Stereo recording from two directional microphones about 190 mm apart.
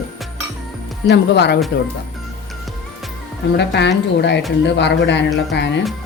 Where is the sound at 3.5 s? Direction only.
60° left (ahead or behind).